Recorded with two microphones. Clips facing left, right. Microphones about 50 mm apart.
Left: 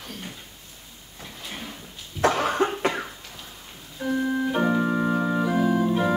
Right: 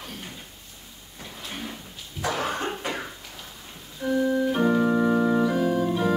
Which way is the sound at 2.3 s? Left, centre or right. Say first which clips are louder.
Left 5 dB; left.